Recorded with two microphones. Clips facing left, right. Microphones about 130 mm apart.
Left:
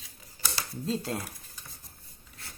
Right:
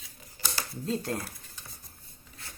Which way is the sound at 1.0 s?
15° left (ahead or behind).